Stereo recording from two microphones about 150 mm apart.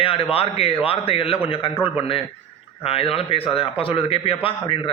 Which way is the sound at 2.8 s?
40° left (ahead or behind).